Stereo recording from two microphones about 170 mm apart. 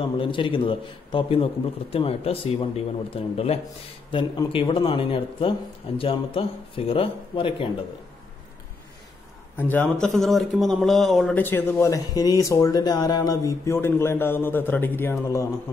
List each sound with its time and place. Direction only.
0.0 s a man's voice: 30° left (ahead or behind)
9.6 s a man's voice: 10° left (ahead or behind)